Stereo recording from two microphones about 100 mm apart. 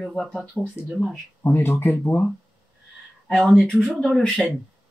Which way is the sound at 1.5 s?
20° left (ahead or behind).